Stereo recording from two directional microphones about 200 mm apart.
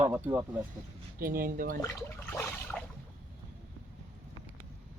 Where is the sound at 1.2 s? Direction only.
45° right (ahead or behind).